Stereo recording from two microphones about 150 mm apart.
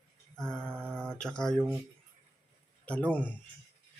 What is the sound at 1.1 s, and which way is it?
Speech, 5° left (ahead or behind).